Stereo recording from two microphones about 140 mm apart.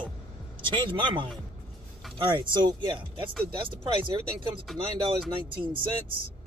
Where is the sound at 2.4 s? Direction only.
35° right (ahead or behind).